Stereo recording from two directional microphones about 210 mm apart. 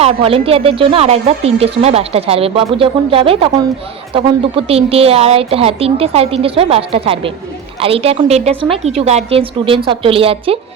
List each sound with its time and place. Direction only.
0.0 s speech: 25° right (ahead or behind)